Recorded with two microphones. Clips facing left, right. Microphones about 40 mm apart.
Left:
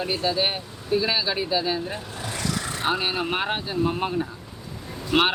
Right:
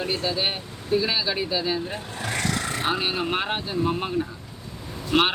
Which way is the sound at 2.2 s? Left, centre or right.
Right.